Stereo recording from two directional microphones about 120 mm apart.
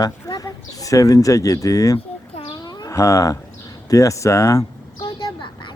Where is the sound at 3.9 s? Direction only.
25° left (ahead or behind).